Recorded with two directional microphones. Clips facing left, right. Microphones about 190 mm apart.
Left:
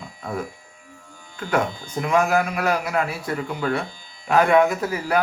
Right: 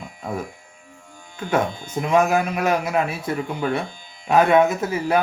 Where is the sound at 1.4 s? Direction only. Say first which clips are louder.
Right 1 dB; 20° right (ahead or behind).